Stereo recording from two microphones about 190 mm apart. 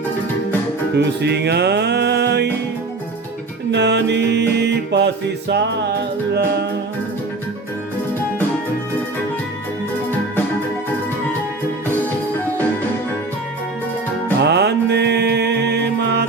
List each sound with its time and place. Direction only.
0.9 s music: 60° right (ahead or behind)
3.7 s music: 65° right (ahead or behind)
14.4 s music: 60° right (ahead or behind)